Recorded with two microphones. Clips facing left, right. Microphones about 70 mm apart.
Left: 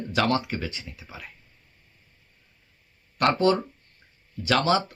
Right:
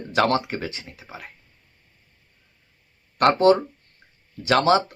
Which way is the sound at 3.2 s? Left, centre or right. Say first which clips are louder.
Right 5 dB; right.